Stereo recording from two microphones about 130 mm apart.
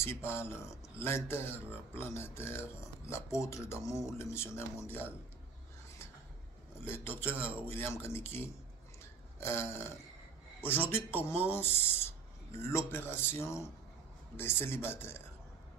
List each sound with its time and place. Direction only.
0.0 s a man's voice: 20° left (ahead or behind)
6.8 s a man's voice: 15° left (ahead or behind)